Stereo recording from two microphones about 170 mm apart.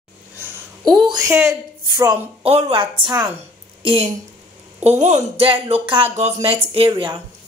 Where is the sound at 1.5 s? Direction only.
25° right (ahead or behind).